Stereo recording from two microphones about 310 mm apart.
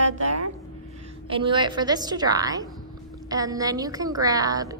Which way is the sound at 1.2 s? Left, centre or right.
Centre.